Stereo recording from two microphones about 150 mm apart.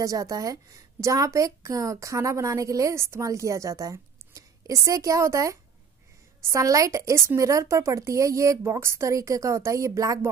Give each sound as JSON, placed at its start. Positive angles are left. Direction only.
{"t": 0.0, "sound": "a woman's voice", "side_deg": -20}